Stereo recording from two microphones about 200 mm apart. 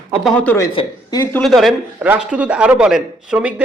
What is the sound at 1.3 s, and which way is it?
A man's voice, centre (ahead or behind).